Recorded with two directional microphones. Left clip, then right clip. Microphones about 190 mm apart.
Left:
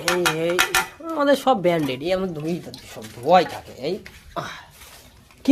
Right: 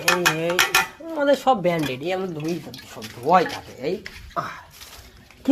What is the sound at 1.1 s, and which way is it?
Speech, 25° left (ahead or behind).